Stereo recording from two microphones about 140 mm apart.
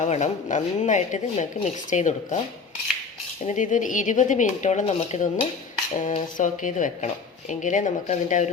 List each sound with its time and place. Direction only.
0.0 s speech: 60° left (ahead or behind)
3.4 s speech: 60° left (ahead or behind)